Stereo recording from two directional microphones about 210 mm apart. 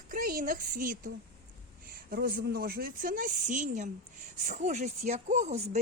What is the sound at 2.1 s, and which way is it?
A woman's voice, 45° right (ahead or behind).